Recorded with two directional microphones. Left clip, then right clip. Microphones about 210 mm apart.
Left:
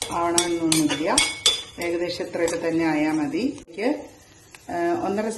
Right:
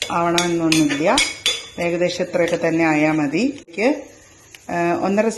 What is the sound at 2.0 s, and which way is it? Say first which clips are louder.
Speech: right 7 dB; 30° right (ahead or behind).